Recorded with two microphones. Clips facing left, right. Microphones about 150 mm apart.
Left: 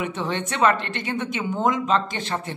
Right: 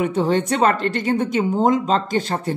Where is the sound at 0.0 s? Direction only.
40° right (ahead or behind).